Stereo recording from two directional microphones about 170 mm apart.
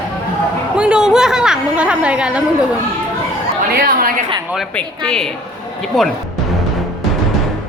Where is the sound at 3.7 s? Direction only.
55° right (ahead or behind).